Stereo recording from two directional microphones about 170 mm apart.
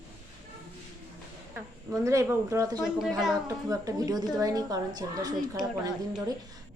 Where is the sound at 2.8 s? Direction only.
Centre (ahead or behind).